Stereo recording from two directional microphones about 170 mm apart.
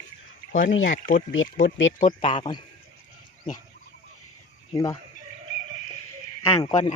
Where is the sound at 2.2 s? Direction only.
30° left (ahead or behind).